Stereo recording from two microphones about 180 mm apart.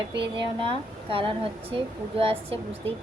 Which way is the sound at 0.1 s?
30° right (ahead or behind).